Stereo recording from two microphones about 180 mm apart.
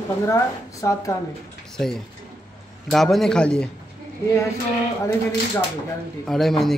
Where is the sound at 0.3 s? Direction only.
20° left (ahead or behind).